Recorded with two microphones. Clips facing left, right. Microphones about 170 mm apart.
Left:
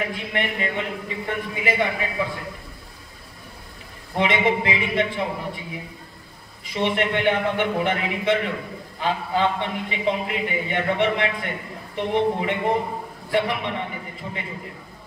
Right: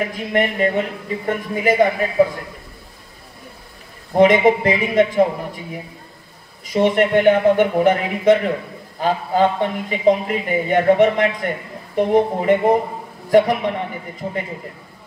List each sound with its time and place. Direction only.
0.1 s a man's voice: 40° right (ahead or behind)
4.1 s a man's voice: 45° right (ahead or behind)
6.6 s a man's voice: 45° right (ahead or behind)